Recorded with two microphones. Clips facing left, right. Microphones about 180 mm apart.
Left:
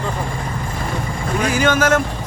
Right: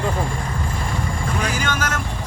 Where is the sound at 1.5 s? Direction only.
50° left (ahead or behind).